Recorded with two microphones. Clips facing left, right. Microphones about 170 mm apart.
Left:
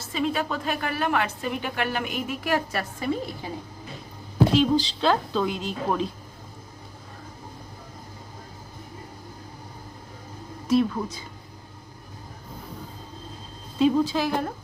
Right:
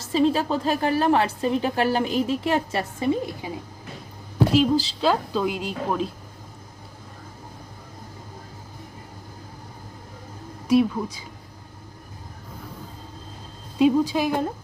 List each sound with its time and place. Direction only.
0.1 s a woman's voice: 30° right (ahead or behind)
4.5 s a woman's voice: 5° right (ahead or behind)
10.7 s a woman's voice: 10° right (ahead or behind)
13.7 s a woman's voice: 10° right (ahead or behind)